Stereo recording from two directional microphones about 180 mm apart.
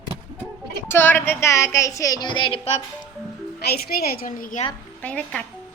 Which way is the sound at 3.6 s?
60° left (ahead or behind).